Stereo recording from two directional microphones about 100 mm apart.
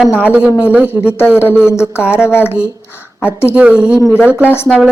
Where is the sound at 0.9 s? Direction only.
15° right (ahead or behind).